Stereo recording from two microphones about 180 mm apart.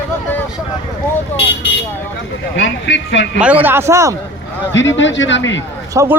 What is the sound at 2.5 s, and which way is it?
Speech, 90° left.